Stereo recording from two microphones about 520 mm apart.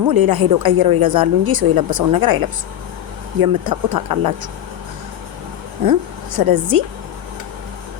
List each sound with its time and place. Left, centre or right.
0.1 s a woman's voice: right
3.4 s a woman's voice: right
5.9 s a woman's voice: right